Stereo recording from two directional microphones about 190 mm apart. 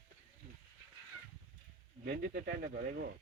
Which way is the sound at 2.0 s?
55° right (ahead or behind).